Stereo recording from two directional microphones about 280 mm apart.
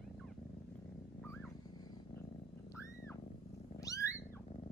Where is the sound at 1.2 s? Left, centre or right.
Centre.